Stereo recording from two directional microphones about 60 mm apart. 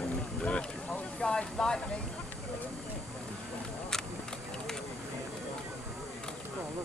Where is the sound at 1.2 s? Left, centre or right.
Centre.